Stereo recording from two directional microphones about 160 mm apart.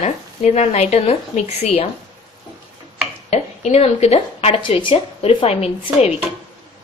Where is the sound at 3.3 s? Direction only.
45° left (ahead or behind).